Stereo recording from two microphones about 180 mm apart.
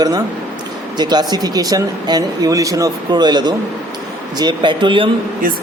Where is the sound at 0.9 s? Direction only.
25° right (ahead or behind).